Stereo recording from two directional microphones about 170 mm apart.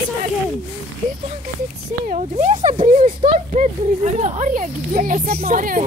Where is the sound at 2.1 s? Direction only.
45° right (ahead or behind).